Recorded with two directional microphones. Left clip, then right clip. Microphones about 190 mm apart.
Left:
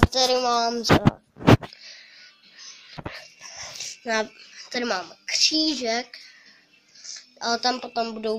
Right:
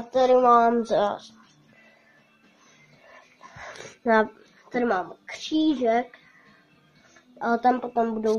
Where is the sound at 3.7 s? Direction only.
5° right (ahead or behind).